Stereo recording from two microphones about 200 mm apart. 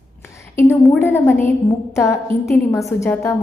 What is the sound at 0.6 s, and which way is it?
A woman's voice, 10° left (ahead or behind).